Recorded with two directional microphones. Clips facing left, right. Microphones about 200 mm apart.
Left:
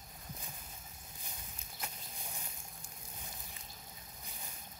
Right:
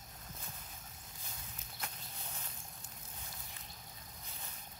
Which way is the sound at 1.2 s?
15° left (ahead or behind).